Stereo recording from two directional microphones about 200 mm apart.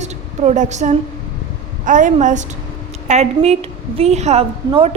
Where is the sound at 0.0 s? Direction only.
35° right (ahead or behind).